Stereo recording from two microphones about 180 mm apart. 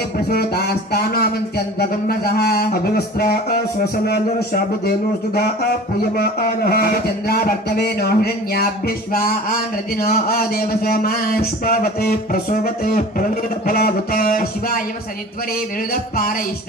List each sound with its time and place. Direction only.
0.3 s speech: 60° left (ahead or behind)
4.8 s speech: 55° left (ahead or behind)
15.9 s speech: 55° left (ahead or behind)